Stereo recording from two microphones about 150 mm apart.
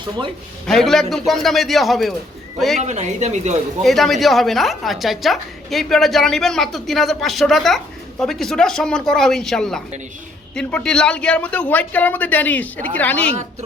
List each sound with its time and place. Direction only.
0.7 s a woman's voice: 5° left (ahead or behind)
2.8 s speech: 50° right (ahead or behind)
3.8 s a woman's voice: centre (ahead or behind)